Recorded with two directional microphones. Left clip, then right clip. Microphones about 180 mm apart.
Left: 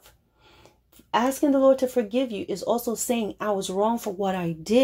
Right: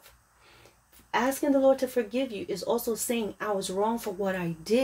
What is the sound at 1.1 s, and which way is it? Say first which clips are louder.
Speech: left 3 dB; 35° left (ahead or behind).